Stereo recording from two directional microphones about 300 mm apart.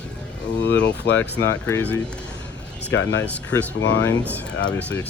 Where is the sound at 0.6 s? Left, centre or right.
Left.